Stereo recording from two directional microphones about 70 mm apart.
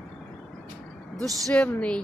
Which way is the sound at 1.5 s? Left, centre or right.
Centre.